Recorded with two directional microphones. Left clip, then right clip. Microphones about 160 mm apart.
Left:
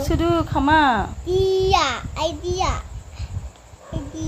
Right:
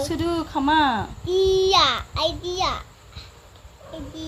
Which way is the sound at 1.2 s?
5° left (ahead or behind).